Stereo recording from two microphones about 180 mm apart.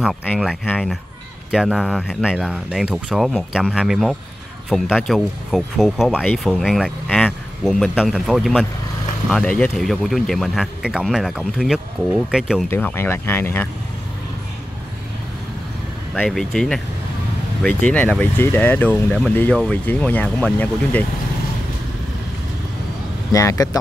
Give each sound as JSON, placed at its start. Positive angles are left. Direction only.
{"t": 0.0, "sound": "speech", "side_deg": 5}
{"t": 12.6, "sound": "speech", "side_deg": 10}
{"t": 16.2, "sound": "speech", "side_deg": 5}
{"t": 23.3, "sound": "speech", "side_deg": 20}